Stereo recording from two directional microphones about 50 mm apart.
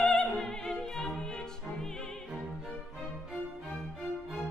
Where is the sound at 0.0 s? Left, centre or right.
Centre.